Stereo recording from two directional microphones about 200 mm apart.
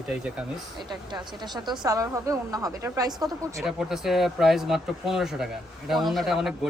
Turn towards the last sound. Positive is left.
turn(degrees=0)  # may be behind; listen again after turning